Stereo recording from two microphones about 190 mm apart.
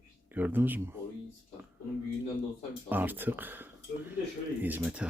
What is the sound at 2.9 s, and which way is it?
Speech, 10° right (ahead or behind).